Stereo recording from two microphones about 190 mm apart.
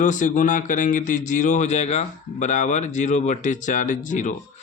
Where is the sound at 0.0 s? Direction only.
40° left (ahead or behind).